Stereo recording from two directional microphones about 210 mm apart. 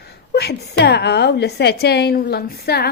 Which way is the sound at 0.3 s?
50° left (ahead or behind).